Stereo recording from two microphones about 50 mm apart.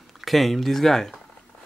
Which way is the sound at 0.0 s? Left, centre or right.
Centre.